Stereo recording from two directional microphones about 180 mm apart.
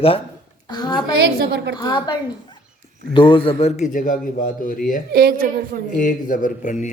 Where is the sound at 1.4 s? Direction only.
70° right (ahead or behind).